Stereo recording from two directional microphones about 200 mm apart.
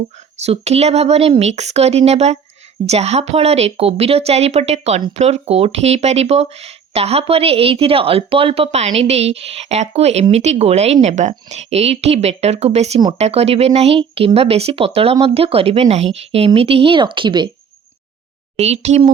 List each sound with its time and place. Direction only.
0.3 s speech: 30° right (ahead or behind)
18.5 s speech: 30° right (ahead or behind)